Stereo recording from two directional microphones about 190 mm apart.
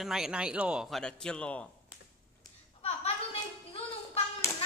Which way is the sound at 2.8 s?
35° left (ahead or behind).